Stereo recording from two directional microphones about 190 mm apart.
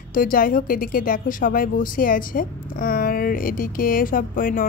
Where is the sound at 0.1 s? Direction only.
45° left (ahead or behind).